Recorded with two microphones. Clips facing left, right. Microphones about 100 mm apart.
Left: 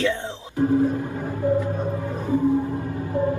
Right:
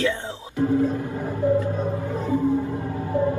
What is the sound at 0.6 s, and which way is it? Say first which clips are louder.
Music: left 1 dB; 20° left (ahead or behind).